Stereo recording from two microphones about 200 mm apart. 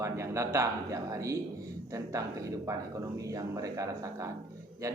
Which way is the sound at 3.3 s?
15° right (ahead or behind).